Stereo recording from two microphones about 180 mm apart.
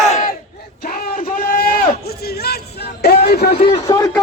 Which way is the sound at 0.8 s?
55° left (ahead or behind).